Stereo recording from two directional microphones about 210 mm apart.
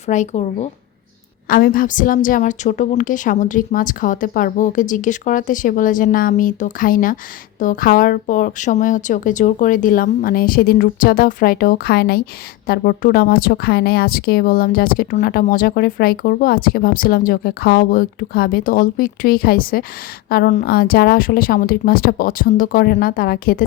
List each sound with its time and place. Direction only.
0.1 s a woman's voice: 35° left (ahead or behind)